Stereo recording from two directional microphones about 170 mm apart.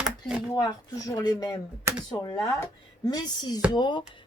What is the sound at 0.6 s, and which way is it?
Speech, 20° left (ahead or behind).